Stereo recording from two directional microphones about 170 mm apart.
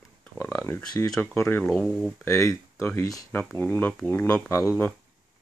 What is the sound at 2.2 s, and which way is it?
Speech, 15° left (ahead or behind).